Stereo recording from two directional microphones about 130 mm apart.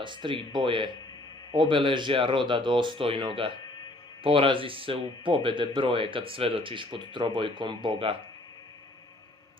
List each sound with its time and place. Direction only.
0.0 s speech: 40° right (ahead or behind)